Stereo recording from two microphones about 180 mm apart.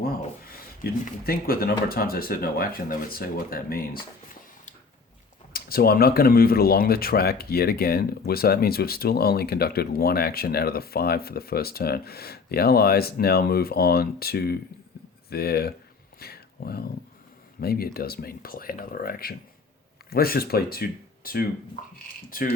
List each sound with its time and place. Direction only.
0.0 s speech: 55° left (ahead or behind)
5.5 s speech: 55° left (ahead or behind)
16.2 s a sound: 60° left (ahead or behind)
17.6 s speech: 60° left (ahead or behind)